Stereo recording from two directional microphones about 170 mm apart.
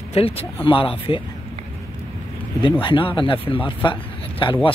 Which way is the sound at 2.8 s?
30° left (ahead or behind).